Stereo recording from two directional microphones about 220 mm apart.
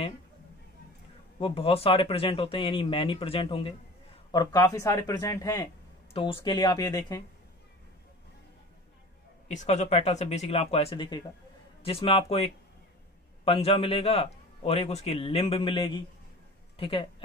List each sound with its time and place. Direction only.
1.4 s a man's voice: 25° left (ahead or behind)
9.5 s a man's voice: 30° left (ahead or behind)
13.5 s a man's voice: 25° left (ahead or behind)